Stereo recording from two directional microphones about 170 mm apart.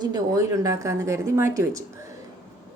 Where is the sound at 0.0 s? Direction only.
20° right (ahead or behind).